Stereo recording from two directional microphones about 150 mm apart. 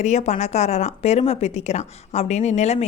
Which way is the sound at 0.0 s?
50° left (ahead or behind).